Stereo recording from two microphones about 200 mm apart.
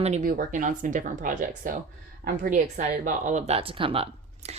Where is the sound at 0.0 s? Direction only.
35° right (ahead or behind).